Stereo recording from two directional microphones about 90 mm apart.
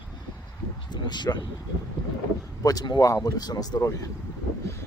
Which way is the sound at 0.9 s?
55° left (ahead or behind).